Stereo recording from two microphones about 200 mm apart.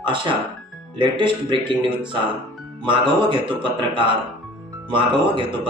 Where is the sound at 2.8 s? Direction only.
25° right (ahead or behind).